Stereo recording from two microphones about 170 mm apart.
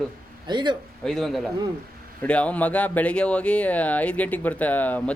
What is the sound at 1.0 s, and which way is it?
Speech, centre (ahead or behind).